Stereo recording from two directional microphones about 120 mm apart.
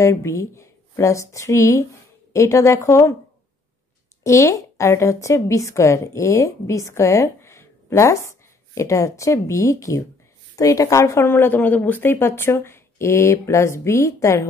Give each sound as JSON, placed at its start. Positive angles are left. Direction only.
{"t": 0.0, "sound": "speech", "side_deg": 25}
{"t": 4.2, "sound": "speech", "side_deg": 25}